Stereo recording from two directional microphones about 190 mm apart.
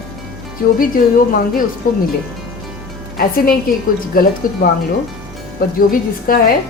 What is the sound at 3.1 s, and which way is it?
A woman's voice, 50° left (ahead or behind).